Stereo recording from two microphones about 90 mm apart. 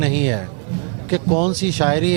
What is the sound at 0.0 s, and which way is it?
Speech, 15° right (ahead or behind).